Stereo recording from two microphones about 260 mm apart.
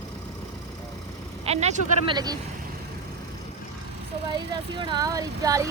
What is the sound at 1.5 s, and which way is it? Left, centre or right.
Speech, right.